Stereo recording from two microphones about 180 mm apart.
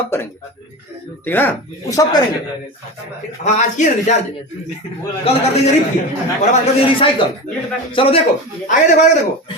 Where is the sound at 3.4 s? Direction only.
40° left (ahead or behind).